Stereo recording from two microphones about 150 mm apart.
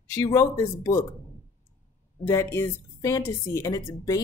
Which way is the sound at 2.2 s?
15° left (ahead or behind).